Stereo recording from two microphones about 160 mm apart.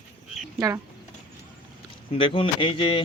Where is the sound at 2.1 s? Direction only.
35° left (ahead or behind).